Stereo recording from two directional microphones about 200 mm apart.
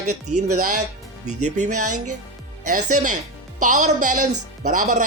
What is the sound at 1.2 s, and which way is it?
Speech, 35° right (ahead or behind).